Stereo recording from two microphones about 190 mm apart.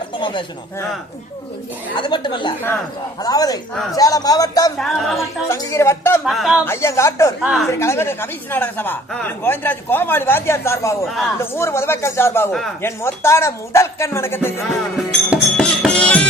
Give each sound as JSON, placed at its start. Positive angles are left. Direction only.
{"t": 0.2, "sound": "speech", "side_deg": 25}
{"t": 2.0, "sound": "speech", "side_deg": 25}
{"t": 4.8, "sound": "music", "side_deg": 0}
{"t": 5.5, "sound": "speech", "side_deg": 15}
{"t": 6.2, "sound": "music", "side_deg": 0}
{"t": 6.7, "sound": "speech", "side_deg": 15}
{"t": 7.4, "sound": "music", "side_deg": 0}
{"t": 7.7, "sound": "speech", "side_deg": 15}
{"t": 11.0, "sound": "music", "side_deg": 0}
{"t": 11.3, "sound": "speech", "side_deg": 15}
{"t": 14.9, "sound": "music", "side_deg": -5}